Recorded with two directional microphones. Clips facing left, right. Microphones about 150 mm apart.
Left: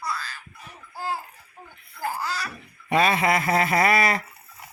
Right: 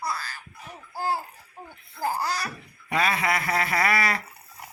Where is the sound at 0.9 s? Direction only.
40° right (ahead or behind).